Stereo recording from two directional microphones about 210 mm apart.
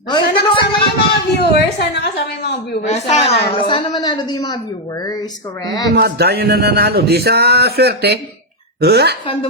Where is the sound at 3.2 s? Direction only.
50° left (ahead or behind).